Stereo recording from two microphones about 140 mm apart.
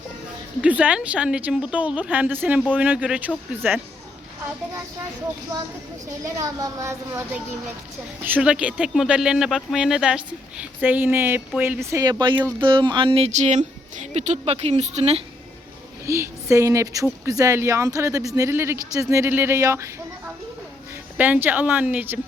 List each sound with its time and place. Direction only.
0.6 s speech: 10° right (ahead or behind)
6.2 s speech: 25° right (ahead or behind)
8.2 s speech: 10° right (ahead or behind)
12.5 s speech: 35° right (ahead or behind)
16.0 s speech: 20° right (ahead or behind)